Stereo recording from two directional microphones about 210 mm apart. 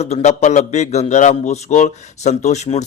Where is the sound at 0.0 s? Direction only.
30° left (ahead or behind).